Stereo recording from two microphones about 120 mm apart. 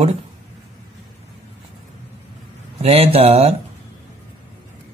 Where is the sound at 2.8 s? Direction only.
55° right (ahead or behind).